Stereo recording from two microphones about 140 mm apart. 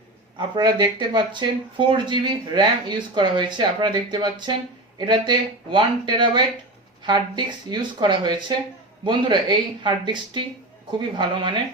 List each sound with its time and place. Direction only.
0.3 s speech: 35° right (ahead or behind)